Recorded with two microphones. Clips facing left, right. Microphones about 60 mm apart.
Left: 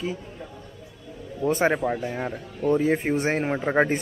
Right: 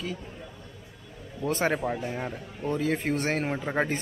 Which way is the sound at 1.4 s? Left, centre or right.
Left.